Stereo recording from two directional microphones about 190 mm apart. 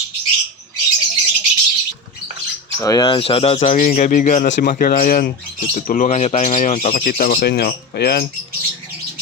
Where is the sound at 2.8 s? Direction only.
20° left (ahead or behind); by 8.2 s 55° left (ahead or behind).